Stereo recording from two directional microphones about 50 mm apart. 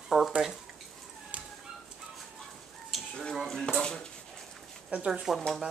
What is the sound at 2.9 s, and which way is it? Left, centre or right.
Frying, centre.